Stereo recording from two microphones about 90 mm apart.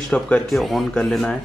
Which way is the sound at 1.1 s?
5° left (ahead or behind).